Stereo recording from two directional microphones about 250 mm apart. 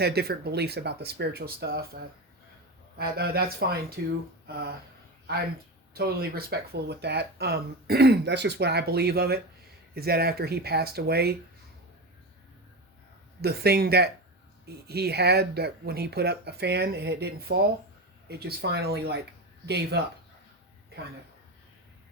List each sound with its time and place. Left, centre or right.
0.0 s speech: right
3.0 s speech: right
5.9 s speech: right
13.4 s speech: right